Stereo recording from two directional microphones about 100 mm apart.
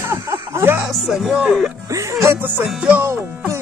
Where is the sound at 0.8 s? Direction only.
Centre (ahead or behind).